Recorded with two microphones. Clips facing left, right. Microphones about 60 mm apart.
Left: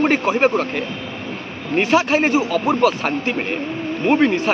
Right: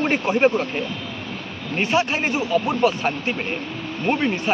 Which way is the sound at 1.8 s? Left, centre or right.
Left.